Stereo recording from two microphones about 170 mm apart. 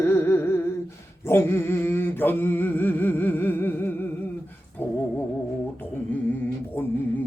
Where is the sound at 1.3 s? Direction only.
15° left (ahead or behind).